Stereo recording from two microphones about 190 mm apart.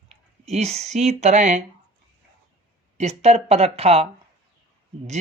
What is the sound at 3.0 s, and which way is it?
Speech, 35° right (ahead or behind).